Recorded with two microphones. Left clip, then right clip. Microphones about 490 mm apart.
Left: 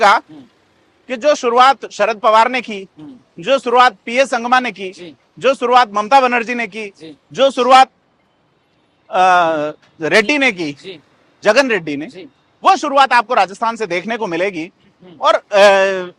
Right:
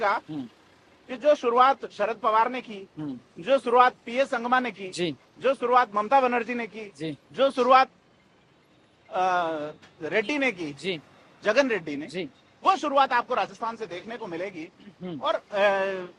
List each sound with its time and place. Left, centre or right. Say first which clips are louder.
0.0 s speech: left 14 dB; left
3.4 s a man's voice: left 9 dB; left
4.9 s speech: right 1 dB; right
5.4 s a man's voice: left 10 dB; left
9.1 s a man's voice: left 14 dB; left
13.6 s speech: left 14 dB; left
14.3 s a man's voice: left 15 dB; left
15.2 s a man's voice: left 14 dB; left